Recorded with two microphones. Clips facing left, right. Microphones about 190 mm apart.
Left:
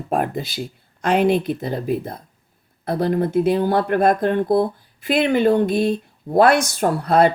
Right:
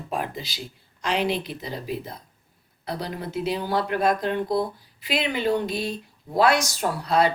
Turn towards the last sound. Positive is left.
turn(degrees=55)  # may be behind; listen again after turning